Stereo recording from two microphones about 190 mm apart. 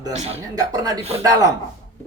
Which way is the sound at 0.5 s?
20° right (ahead or behind).